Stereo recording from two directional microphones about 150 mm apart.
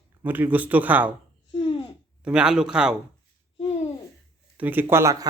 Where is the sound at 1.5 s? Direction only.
35° left (ahead or behind).